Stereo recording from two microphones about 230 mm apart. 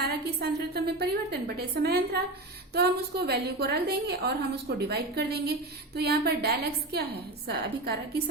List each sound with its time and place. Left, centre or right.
0.0 s a woman's voice: right